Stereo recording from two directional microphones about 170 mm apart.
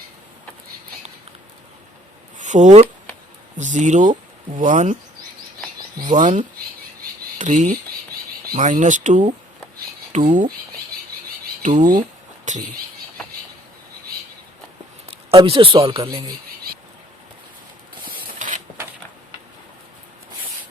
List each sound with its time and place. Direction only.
2.4 s speech: 45° right (ahead or behind)
6.1 s speech: 45° right (ahead or behind)
11.6 s speech: 50° right (ahead or behind)
15.0 s a man's voice: 35° right (ahead or behind)
18.0 s mechanisms: 50° right (ahead or behind)